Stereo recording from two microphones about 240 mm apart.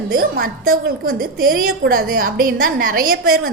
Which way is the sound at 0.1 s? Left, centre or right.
Right.